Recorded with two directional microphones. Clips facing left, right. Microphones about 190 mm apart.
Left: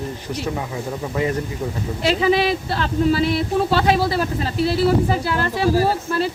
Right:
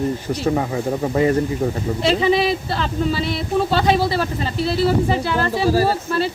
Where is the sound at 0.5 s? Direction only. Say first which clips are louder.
Right 6 dB; 45° right (ahead or behind).